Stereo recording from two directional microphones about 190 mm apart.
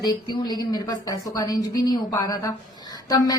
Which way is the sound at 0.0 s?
20° left (ahead or behind).